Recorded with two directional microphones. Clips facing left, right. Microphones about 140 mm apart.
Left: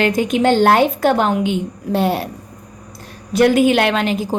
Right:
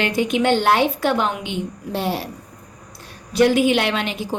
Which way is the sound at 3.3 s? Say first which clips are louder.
Left 3 dB; 50° left (ahead or behind).